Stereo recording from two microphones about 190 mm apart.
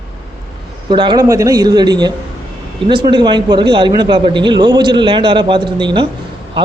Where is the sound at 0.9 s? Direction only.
25° right (ahead or behind).